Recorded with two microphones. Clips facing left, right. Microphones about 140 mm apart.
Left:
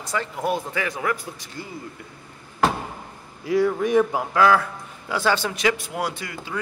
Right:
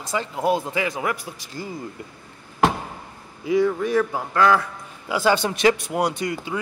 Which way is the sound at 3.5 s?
5° left (ahead or behind).